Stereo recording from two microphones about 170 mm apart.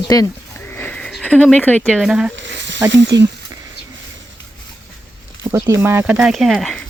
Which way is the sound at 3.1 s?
90° right.